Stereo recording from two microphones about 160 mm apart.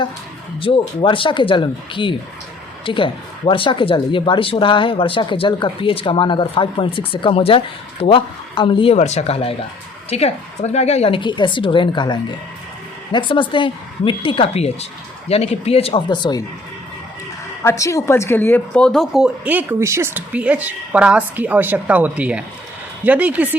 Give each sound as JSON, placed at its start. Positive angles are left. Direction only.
{"t": 0.6, "sound": "speech", "side_deg": 35}
{"t": 16.0, "sound": "speech", "side_deg": 25}
{"t": 17.6, "sound": "speech", "side_deg": 15}